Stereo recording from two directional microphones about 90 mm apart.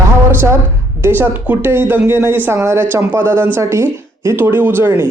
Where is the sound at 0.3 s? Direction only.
25° right (ahead or behind).